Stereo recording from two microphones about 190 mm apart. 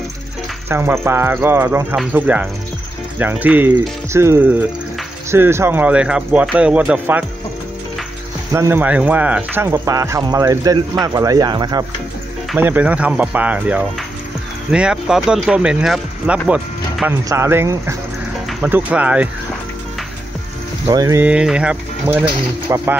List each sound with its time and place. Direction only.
0.7 s speech: 10° right (ahead or behind)
8.5 s speech: 15° right (ahead or behind)
12.5 s speech: 10° right (ahead or behind)
16.4 s music: 5° right (ahead or behind)
17.2 s speech: 15° right (ahead or behind)
20.8 s speech: 15° right (ahead or behind)